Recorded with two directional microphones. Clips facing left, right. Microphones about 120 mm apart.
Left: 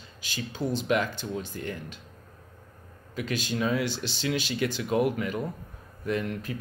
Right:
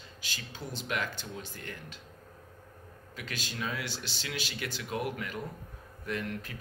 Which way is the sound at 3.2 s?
20° left (ahead or behind).